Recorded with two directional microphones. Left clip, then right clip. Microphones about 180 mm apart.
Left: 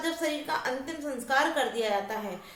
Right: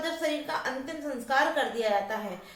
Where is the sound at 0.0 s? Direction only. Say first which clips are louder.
Right 1 dB; 20° left (ahead or behind).